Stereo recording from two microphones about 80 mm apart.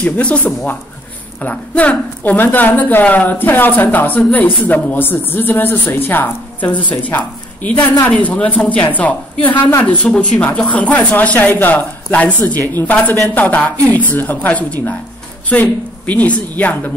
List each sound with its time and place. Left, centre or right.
0.0 s speech: centre